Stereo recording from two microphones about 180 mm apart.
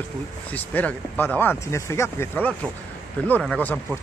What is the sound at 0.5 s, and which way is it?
Speech, 10° left (ahead or behind).